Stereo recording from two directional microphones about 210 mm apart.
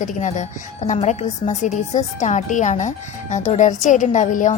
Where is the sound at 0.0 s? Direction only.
35° left (ahead or behind).